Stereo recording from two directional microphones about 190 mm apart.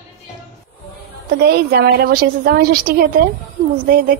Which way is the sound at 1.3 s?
60° right (ahead or behind).